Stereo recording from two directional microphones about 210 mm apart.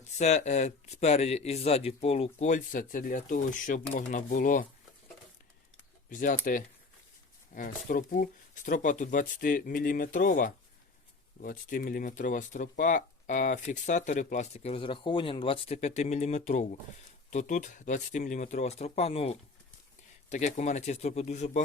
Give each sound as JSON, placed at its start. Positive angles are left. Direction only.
{"t": 0.2, "sound": "speech", "side_deg": 35}
{"t": 6.1, "sound": "speech", "side_deg": 40}